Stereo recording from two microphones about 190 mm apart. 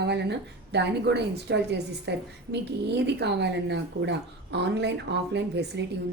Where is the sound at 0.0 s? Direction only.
65° right (ahead or behind).